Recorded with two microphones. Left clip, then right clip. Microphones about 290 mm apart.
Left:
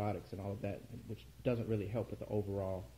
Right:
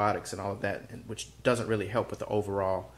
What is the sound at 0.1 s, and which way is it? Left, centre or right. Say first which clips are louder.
Speech: right 11 dB; right.